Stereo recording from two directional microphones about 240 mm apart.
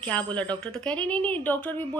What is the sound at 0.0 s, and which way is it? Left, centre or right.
A woman's voice, centre.